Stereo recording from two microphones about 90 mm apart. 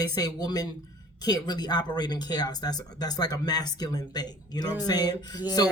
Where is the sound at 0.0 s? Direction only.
45° left (ahead or behind).